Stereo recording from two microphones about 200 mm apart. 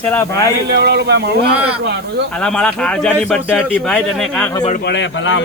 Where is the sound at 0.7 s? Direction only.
55° right (ahead or behind).